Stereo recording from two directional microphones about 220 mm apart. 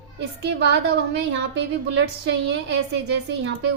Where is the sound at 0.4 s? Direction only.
50° right (ahead or behind).